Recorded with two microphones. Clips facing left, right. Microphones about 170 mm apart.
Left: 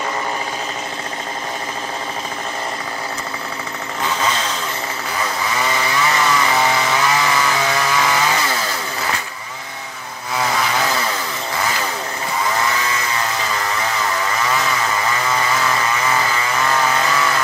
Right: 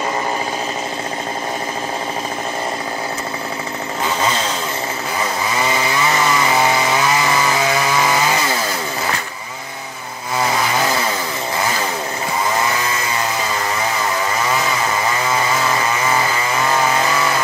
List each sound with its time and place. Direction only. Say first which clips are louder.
6.2 s chainsaw: right 2 dB; 15° right (ahead or behind)
16.6 s chainsaw: right 2 dB; 15° right (ahead or behind)